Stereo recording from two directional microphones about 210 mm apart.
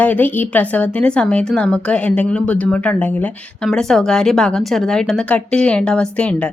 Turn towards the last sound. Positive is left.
turn(degrees=5)  # may be behind; listen again after turning